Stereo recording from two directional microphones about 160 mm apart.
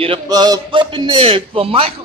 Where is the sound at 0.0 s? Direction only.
30° right (ahead or behind).